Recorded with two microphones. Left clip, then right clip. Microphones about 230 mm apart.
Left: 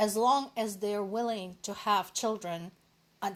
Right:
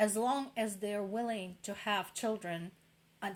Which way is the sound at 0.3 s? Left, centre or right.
Left.